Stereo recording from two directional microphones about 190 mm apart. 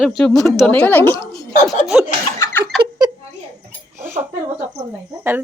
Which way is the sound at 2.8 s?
20° right (ahead or behind).